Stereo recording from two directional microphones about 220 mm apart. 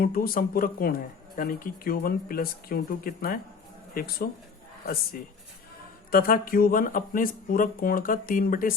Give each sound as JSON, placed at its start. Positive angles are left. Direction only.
{"t": 0.0, "sound": "speech", "side_deg": 40}
{"t": 6.1, "sound": "speech", "side_deg": 40}